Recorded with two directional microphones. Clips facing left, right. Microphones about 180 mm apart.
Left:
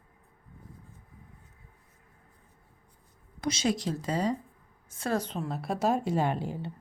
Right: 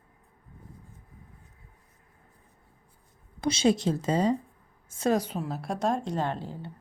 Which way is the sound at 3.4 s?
30° right (ahead or behind).